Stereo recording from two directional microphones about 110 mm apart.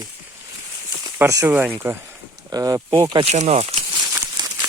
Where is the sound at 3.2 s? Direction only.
70° right (ahead or behind).